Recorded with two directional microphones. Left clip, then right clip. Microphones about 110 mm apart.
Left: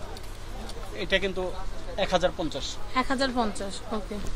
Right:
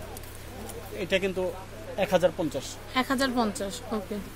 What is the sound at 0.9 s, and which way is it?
Speech, 90° right.